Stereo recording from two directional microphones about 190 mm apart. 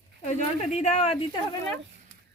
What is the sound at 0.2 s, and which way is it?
Speech, 40° left (ahead or behind).